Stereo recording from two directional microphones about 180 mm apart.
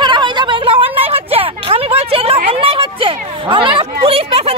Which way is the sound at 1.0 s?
30° right (ahead or behind).